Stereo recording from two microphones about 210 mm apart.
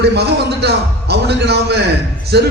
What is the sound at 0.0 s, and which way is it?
A man's voice, 50° right (ahead or behind).